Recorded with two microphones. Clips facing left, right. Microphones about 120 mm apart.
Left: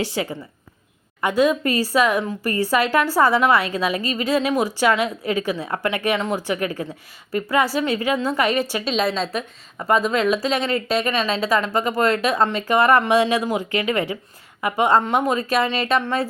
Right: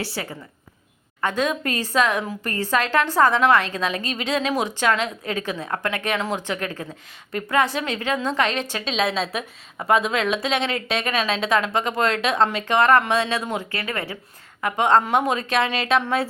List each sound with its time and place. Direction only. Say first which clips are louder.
0.0 s a woman's voice: left 5 dB; 15° left (ahead or behind)
6.1 s a woman's voice: left 2 dB; centre (ahead or behind)
6.4 s a woman's voice: left 4 dB; 10° left (ahead or behind)